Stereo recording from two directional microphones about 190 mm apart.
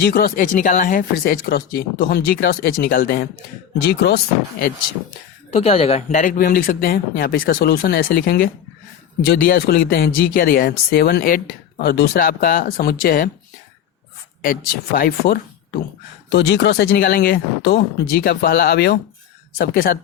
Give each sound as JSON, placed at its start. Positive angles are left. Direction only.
{"t": 0.0, "sound": "speech", "side_deg": 55}
{"t": 5.5, "sound": "speech", "side_deg": 35}
{"t": 14.4, "sound": "speech", "side_deg": 50}
{"t": 16.3, "sound": "speech", "side_deg": 65}